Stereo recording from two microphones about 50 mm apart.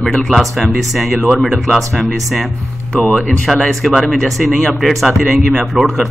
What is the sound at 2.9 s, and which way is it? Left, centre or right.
Speech, left.